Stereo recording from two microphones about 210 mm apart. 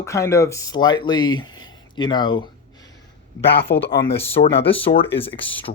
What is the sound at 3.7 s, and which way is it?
Speech, 50° left (ahead or behind).